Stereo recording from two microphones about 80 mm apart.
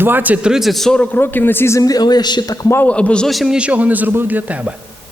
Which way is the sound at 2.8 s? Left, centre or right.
Centre.